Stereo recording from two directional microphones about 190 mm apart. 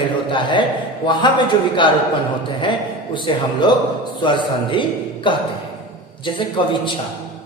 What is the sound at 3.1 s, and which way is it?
A man's voice, 25° left (ahead or behind).